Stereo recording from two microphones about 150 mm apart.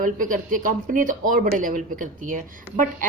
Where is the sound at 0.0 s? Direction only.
65° right (ahead or behind).